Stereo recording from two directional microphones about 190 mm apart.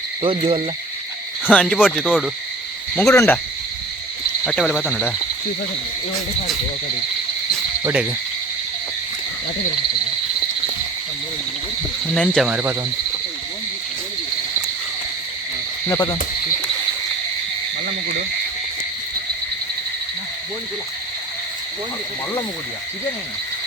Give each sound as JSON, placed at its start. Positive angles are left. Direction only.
{"t": 0.2, "sound": "cricket", "side_deg": -30}
{"t": 1.5, "sound": "speech", "side_deg": 5}
{"t": 2.9, "sound": "cricket", "side_deg": 10}
{"t": 4.4, "sound": "speech", "side_deg": 0}
{"t": 12.0, "sound": "speech", "side_deg": 5}
{"t": 12.5, "sound": "cricket", "side_deg": -10}
{"t": 15.9, "sound": "frog", "side_deg": 20}